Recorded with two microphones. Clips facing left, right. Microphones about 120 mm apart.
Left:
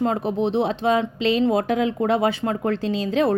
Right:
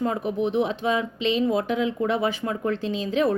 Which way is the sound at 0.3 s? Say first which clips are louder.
Left 2 dB; 30° left (ahead or behind).